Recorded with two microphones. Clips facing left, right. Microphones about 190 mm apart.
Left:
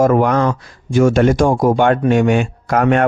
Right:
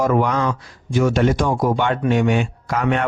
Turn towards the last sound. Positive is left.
turn(degrees=50)  # may be behind; listen again after turning